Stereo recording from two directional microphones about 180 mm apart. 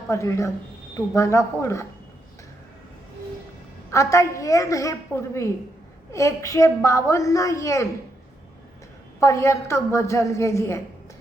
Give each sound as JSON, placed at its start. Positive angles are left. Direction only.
{"t": 0.1, "sound": "a woman's voice", "side_deg": 15}
{"t": 3.9, "sound": "a woman's voice", "side_deg": 15}
{"t": 9.2, "sound": "a woman's voice", "side_deg": 15}